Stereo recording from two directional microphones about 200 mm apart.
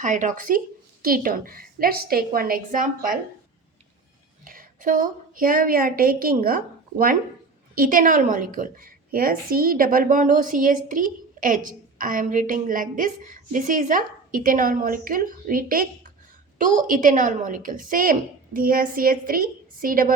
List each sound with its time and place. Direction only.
0.0 s a woman's voice: 40° right (ahead or behind)
4.4 s a woman's voice: 40° right (ahead or behind)
7.8 s a woman's voice: 40° right (ahead or behind)